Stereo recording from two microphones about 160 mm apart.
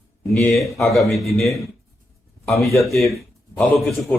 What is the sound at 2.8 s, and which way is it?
Speech, centre (ahead or behind).